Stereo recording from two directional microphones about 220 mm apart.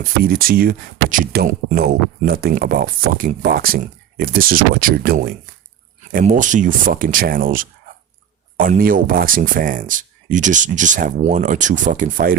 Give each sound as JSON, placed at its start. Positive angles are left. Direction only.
{"t": 0.0, "sound": "speech", "side_deg": -40}